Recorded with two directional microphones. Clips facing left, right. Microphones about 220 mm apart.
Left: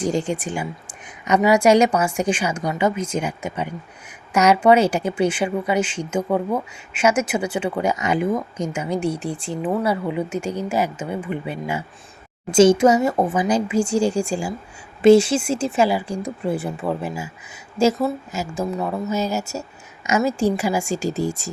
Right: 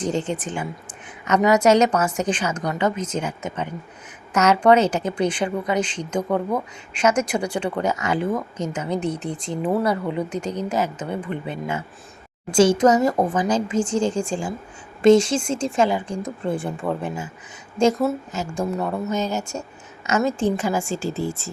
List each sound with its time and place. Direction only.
0.0 s a woman's voice: 10° left (ahead or behind)
12.5 s speech: 20° left (ahead or behind)
12.7 s a woman's voice: 10° left (ahead or behind)